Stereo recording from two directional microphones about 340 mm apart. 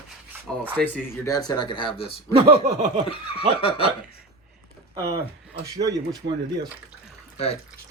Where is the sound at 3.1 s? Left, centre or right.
Centre.